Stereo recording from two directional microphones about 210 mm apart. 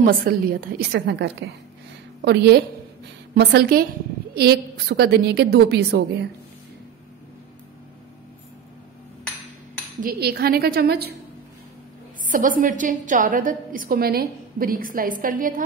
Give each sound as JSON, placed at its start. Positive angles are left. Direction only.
{"t": 0.0, "sound": "a woman's voice", "side_deg": -45}
{"t": 9.9, "sound": "a woman's voice", "side_deg": -45}
{"t": 12.3, "sound": "a woman's voice", "side_deg": -40}